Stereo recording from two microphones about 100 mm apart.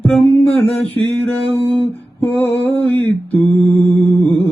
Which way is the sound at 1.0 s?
15° left (ahead or behind).